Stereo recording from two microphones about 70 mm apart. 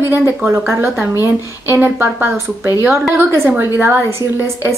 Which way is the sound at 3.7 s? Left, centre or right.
Right.